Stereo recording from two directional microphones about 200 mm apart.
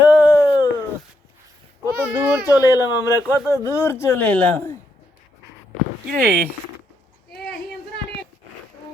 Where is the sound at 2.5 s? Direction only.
20° left (ahead or behind).